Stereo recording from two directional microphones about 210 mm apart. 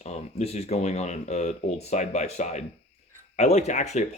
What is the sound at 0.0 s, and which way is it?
Speech, 30° left (ahead or behind).